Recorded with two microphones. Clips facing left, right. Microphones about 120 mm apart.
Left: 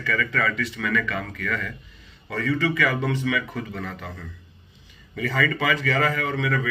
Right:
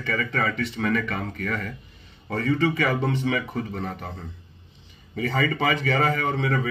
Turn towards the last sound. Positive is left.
turn(degrees=-30)  # may be behind; listen again after turning